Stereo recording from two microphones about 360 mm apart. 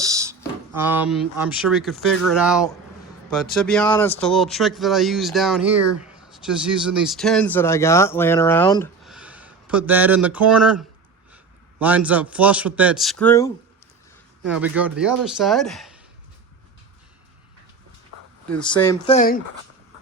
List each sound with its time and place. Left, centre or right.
0.0 s a sound: centre
0.8 s speech: centre
14.5 s speech: centre
18.5 s speech: centre
19.1 s speech: left